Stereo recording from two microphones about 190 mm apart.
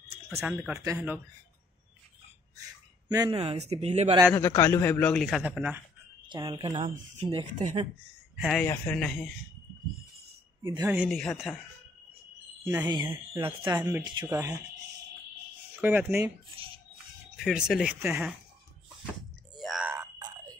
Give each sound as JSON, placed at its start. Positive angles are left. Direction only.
{"t": 0.3, "sound": "speech", "side_deg": -10}
{"t": 3.1, "sound": "a man's voice", "side_deg": -20}
{"t": 4.4, "sound": "a man's voice", "side_deg": 15}
{"t": 6.2, "sound": "speech", "side_deg": -25}
{"t": 6.8, "sound": "a man's voice", "side_deg": -35}
{"t": 8.4, "sound": "speech", "side_deg": 0}
{"t": 10.9, "sound": "speech", "side_deg": -5}
{"t": 12.6, "sound": "speech", "side_deg": -15}
{"t": 15.8, "sound": "speech", "side_deg": -10}
{"t": 17.4, "sound": "speech", "side_deg": 0}
{"t": 19.5, "sound": "a sound", "side_deg": 0}
{"t": 19.9, "sound": "a sound", "side_deg": -15}